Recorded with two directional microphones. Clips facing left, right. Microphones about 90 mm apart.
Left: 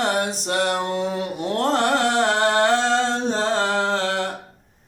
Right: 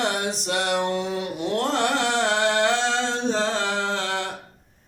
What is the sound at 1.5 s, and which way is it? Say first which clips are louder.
Carnatic music: left 4 dB; 40° left (ahead or behind).